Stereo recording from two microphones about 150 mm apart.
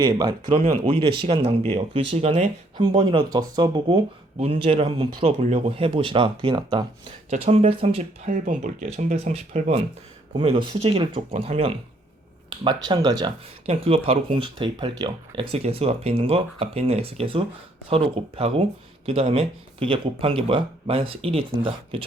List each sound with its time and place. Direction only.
0.0 s speech: 30° right (ahead or behind)
2.7 s speech: 30° right (ahead or behind)
4.4 s speech: 40° right (ahead or behind)
7.3 s speech: 45° right (ahead or behind)
8.3 s speech: 65° right (ahead or behind)
8.8 s speech: 45° right (ahead or behind); by 13.3 s 25° right (ahead or behind)
13.7 s speech: 40° right (ahead or behind)